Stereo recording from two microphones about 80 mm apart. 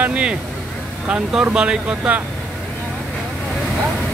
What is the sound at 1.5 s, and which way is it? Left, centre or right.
Speech, centre.